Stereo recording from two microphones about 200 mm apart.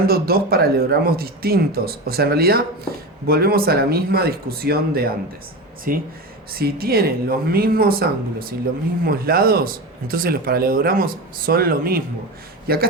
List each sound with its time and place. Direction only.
0.1 s a man's voice: 50° right (ahead or behind)